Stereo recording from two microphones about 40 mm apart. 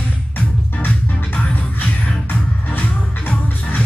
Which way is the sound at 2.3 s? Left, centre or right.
Left.